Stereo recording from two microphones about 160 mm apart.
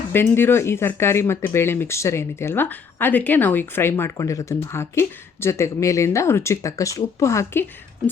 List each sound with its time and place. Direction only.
0.1 s speech: 15° left (ahead or behind)